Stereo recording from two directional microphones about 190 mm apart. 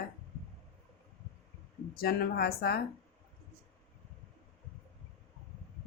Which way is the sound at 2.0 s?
55° left (ahead or behind).